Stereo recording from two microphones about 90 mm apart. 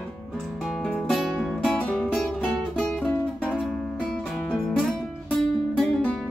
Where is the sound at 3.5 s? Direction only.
5° right (ahead or behind).